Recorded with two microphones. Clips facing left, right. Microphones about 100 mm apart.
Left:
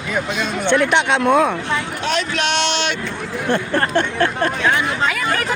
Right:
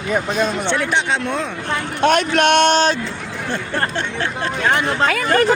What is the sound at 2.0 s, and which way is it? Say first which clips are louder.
Speech: right 8 dB; 50° right (ahead or behind).